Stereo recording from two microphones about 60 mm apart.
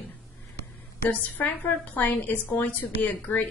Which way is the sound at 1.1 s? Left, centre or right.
Left.